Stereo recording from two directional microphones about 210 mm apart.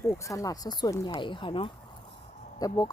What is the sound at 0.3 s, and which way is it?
Speech, 15° left (ahead or behind).